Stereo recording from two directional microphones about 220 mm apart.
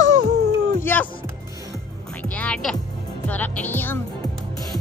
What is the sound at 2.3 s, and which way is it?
Speech, 5° left (ahead or behind).